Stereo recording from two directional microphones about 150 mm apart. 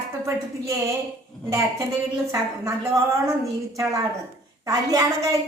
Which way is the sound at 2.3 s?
20° right (ahead or behind).